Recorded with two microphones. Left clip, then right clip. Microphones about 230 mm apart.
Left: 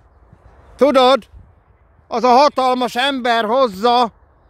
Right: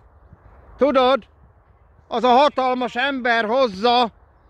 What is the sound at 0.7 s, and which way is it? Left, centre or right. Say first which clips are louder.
Speech: left 5 dB; left.